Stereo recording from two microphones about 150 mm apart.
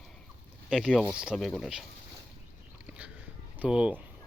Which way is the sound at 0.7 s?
5° left (ahead or behind).